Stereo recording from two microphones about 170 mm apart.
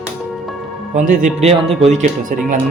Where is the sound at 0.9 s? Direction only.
45° right (ahead or behind).